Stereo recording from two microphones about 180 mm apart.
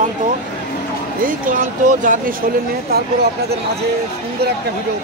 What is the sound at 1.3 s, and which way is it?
Speech, 45° right (ahead or behind).